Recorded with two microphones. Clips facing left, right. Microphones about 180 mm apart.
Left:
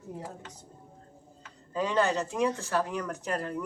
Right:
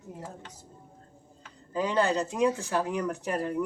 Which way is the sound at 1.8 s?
15° right (ahead or behind).